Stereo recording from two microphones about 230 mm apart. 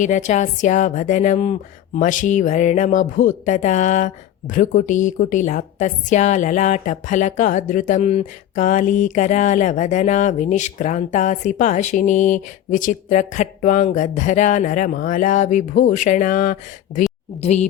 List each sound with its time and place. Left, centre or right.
0.0 s speech: left